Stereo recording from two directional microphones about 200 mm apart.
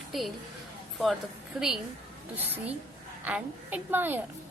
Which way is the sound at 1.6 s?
5° right (ahead or behind).